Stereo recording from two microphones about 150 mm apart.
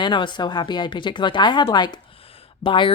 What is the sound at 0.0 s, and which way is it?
Speech, 30° left (ahead or behind).